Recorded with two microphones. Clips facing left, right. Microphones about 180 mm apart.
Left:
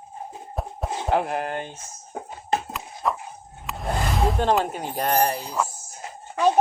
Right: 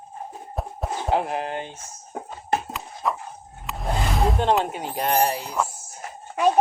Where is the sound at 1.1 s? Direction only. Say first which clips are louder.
Left 1 dB; 55° left (ahead or behind).